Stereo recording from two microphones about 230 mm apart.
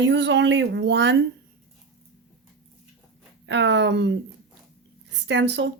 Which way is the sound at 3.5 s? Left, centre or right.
Right.